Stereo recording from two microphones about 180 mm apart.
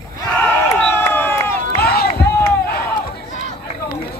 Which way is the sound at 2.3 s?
15° left (ahead or behind).